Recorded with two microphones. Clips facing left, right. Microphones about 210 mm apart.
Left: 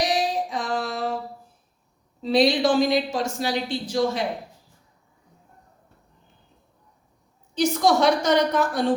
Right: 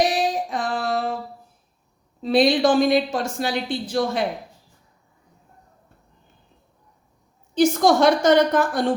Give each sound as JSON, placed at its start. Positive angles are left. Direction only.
{"t": 0.0, "sound": "a sound", "side_deg": -55}
{"t": 2.2, "sound": "speech", "side_deg": -55}
{"t": 7.5, "sound": "a woman's voice", "side_deg": -50}